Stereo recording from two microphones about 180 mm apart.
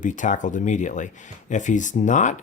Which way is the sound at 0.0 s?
45° left (ahead or behind).